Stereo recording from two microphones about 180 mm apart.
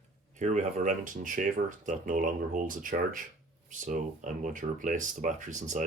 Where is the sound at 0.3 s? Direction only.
40° right (ahead or behind).